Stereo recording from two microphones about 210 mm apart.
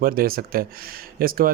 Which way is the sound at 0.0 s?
45° right (ahead or behind).